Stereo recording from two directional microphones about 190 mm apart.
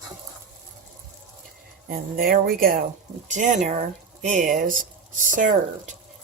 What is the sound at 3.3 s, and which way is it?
Speech, 40° right (ahead or behind).